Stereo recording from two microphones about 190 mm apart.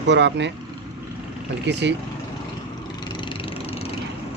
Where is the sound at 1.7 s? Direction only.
65° right (ahead or behind).